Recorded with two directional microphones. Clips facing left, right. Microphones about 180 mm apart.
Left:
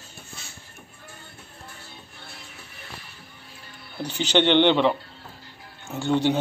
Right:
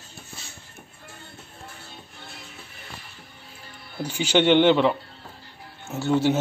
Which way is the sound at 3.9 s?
10° right (ahead or behind).